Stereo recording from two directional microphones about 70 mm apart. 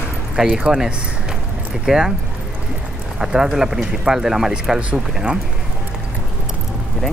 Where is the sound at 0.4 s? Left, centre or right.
Centre.